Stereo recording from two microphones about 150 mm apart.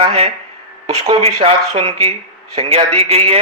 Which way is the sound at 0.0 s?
35° right (ahead or behind).